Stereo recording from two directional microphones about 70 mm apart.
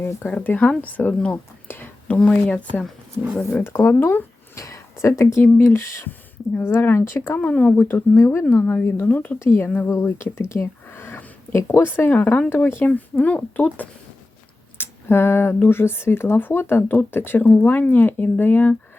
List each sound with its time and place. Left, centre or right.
0.3 s speech: left
1.6 s whispering: left
2.1 s speech: centre
3.6 s speech: left
4.5 s a sound: left
5.4 s speech: left
7.3 s speech: left
9.4 s speech: left
10.5 s a sound: left
11.5 s speech: left
14.8 s a sound: left
15.7 s speech: left